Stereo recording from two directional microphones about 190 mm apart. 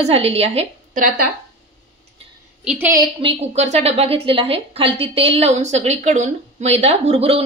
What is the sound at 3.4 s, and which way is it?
A woman's voice, 35° right (ahead or behind).